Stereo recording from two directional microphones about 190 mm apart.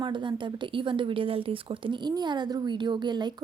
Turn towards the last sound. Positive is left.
turn(degrees=-20)  # may be behind; listen again after turning